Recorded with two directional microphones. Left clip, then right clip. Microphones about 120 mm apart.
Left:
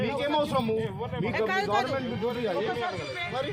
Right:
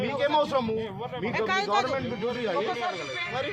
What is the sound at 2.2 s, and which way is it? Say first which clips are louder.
Speech: even; 30° left (ahead or behind).